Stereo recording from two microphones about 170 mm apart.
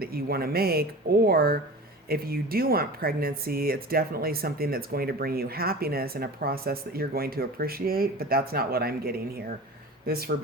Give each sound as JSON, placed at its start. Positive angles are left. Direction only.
{"t": 0.0, "sound": "speech", "side_deg": -65}